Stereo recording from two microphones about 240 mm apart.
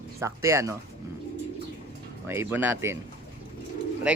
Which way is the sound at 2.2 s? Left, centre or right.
Centre.